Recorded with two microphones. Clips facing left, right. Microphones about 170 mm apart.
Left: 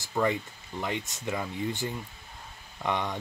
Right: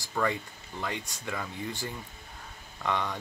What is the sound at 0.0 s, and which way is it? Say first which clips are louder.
Speech: left 3 dB; 20° left (ahead or behind).